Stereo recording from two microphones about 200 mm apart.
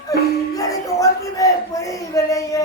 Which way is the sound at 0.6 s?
15° left (ahead or behind).